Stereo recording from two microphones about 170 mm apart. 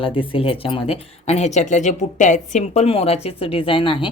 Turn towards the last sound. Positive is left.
turn(degrees=30)  # may be behind; listen again after turning